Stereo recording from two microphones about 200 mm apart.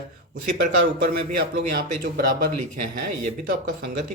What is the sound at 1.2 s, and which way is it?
Speech, 45° right (ahead or behind).